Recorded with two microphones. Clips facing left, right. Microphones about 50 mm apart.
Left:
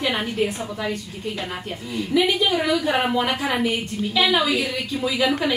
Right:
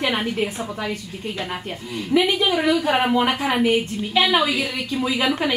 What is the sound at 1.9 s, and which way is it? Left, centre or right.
A woman's voice, centre.